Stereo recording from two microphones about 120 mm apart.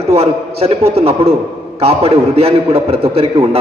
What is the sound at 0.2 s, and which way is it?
A man's voice, 55° right (ahead or behind).